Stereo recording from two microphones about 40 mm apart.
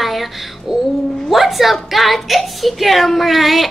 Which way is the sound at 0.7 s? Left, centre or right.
Centre.